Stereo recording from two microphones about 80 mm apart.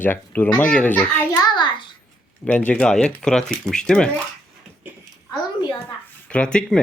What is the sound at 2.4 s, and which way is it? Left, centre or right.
Speech, centre.